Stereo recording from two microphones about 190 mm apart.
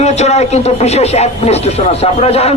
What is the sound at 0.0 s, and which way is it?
A man's voice, 35° left (ahead or behind).